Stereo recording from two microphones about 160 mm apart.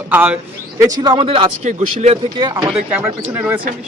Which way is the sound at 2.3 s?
25° right (ahead or behind).